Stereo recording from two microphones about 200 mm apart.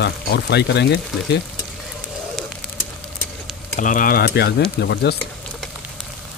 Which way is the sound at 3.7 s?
40° left (ahead or behind).